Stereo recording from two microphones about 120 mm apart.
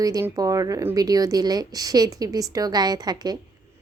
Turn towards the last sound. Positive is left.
turn(degrees=-35)  # may be behind; listen again after turning